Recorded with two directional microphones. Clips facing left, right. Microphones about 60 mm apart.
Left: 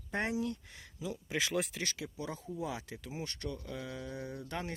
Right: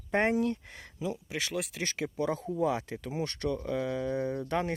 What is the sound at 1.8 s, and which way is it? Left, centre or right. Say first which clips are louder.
Speech: right 7 dB; right.